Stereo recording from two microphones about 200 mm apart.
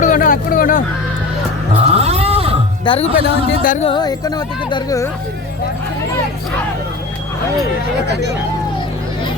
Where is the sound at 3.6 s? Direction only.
40° left (ahead or behind).